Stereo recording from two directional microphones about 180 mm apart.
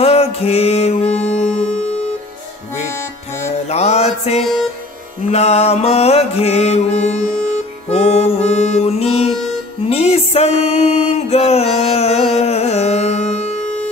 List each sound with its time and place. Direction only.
0.0 s music: 35° left (ahead or behind)
1.0 s music: 5° left (ahead or behind)
3.5 s music: 35° left (ahead or behind)
11.2 s carnatic music: 35° left (ahead or behind)